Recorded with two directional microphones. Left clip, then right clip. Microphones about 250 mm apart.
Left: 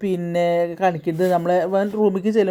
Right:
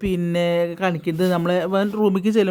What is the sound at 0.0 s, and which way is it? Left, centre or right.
Speech, centre.